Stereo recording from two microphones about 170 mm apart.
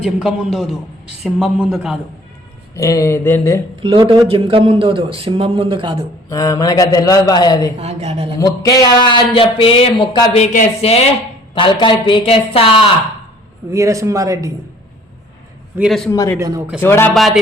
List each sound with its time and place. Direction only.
0.0 s a man's voice: 5° right (ahead or behind)
2.7 s speech: 20° left (ahead or behind)
3.8 s a man's voice: 35° right (ahead or behind)
6.2 s speech: 20° left (ahead or behind)
7.8 s a man's voice: 40° right (ahead or behind)
8.4 s a man's voice: 20° left (ahead or behind)
13.7 s speech: 20° right (ahead or behind)
15.7 s a man's voice: 15° right (ahead or behind)
16.8 s speech: 15° left (ahead or behind)